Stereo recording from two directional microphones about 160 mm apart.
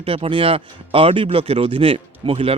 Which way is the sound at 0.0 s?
35° right (ahead or behind).